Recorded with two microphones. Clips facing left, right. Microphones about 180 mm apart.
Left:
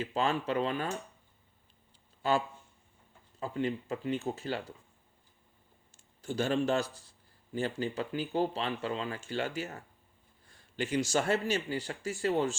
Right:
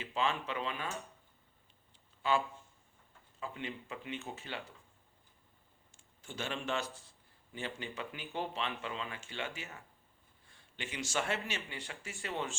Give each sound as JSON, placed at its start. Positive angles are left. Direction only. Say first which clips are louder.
{"t": 0.0, "sound": "speech", "louder": "left 4 dB", "side_deg": 40}
{"t": 3.4, "sound": "speech", "louder": "left 9 dB", "side_deg": 35}
{"t": 5.9, "sound": "a sound", "louder": "left 11 dB", "side_deg": 35}
{"t": 7.5, "sound": "speech", "louder": "left 9 dB", "side_deg": 40}